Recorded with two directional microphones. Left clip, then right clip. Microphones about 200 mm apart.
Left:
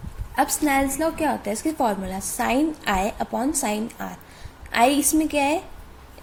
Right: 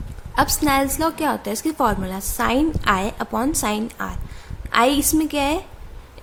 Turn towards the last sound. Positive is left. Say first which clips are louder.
# right 1 dB
turn(degrees=-20)  # may be behind; listen again after turning